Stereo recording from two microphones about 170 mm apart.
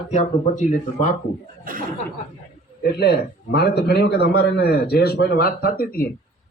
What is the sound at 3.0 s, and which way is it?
A man's voice, 70° left (ahead or behind).